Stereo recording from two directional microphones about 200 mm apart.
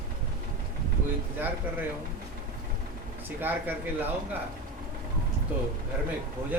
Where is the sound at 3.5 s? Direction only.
10° right (ahead or behind).